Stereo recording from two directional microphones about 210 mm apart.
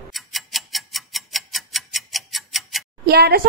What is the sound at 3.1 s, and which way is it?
Speech, 50° right (ahead or behind).